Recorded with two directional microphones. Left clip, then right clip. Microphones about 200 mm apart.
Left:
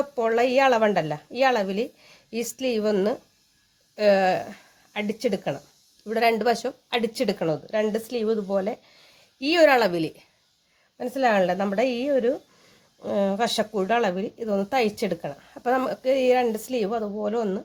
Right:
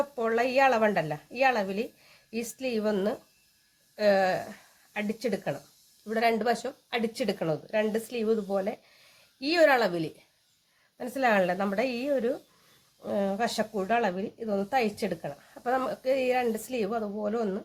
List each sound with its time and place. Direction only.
0.2 s speech: 35° left (ahead or behind)
10.9 s a woman's voice: 20° left (ahead or behind)